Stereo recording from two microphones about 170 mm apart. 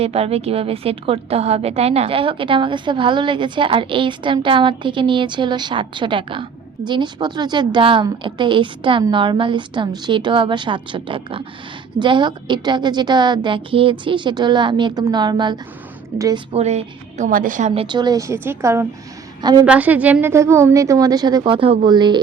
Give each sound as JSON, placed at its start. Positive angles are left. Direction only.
{"t": 0.0, "sound": "a woman's voice", "side_deg": -35}
{"t": 16.5, "sound": "a woman's voice", "side_deg": -40}
{"t": 17.8, "sound": "a woman's voice", "side_deg": -25}
{"t": 19.6, "sound": "a woman's voice", "side_deg": -10}